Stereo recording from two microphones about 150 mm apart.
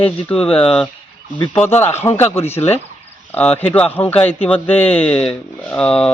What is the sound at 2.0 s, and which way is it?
Speech, 15° left (ahead or behind).